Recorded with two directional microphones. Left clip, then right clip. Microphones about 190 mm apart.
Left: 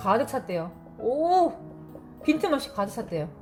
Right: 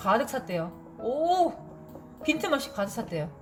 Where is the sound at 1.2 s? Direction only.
25° left (ahead or behind).